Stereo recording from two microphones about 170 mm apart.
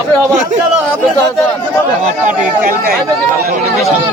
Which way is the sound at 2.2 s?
55° right (ahead or behind).